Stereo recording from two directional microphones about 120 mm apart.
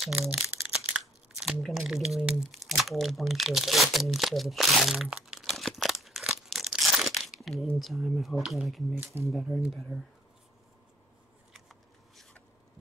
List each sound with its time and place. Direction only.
0.3 s crumpling: 10° right (ahead or behind)
8.9 s speech: 20° right (ahead or behind)
9.6 s speech: centre (ahead or behind)
11.5 s a sound: centre (ahead or behind)